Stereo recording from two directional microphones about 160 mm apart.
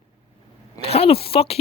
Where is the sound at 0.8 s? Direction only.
40° left (ahead or behind).